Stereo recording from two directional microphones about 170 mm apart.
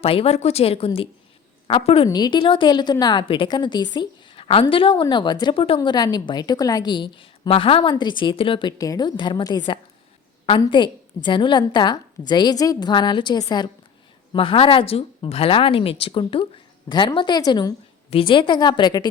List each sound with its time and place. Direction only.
0.0 s a woman's voice: 35° left (ahead or behind)
2.0 s a woman's voice: 25° left (ahead or behind)
3.9 s a sound: 30° left (ahead or behind)
4.7 s a woman's voice: 30° left (ahead or behind)